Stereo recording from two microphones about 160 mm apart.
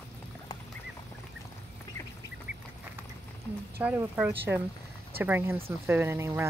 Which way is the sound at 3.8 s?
10° right (ahead or behind).